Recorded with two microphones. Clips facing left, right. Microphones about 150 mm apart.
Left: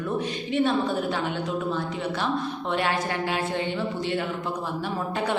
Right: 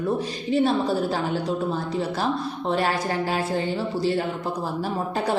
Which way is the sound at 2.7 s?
40° right (ahead or behind).